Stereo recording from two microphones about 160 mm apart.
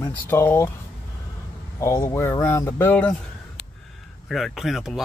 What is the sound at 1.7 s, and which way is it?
Speech, 20° left (ahead or behind).